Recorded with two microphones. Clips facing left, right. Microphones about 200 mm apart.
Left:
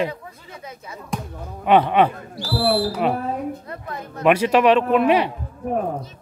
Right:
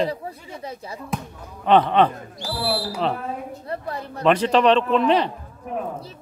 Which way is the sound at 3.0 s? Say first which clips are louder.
Left 1 dB; 10° left (ahead or behind).